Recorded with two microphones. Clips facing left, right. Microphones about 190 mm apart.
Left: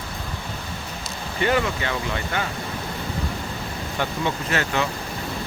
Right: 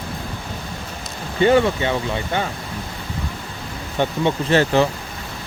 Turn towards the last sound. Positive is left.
turn(degrees=-30)  # may be behind; listen again after turning